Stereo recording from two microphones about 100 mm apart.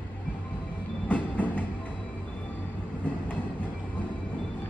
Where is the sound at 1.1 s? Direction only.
15° left (ahead or behind).